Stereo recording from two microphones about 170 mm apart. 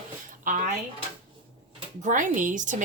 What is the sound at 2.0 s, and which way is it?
Speech, 50° right (ahead or behind).